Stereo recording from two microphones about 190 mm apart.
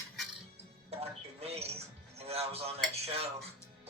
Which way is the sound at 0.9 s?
30° right (ahead or behind).